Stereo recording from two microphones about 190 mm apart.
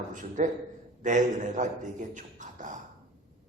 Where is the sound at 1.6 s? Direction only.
40° right (ahead or behind).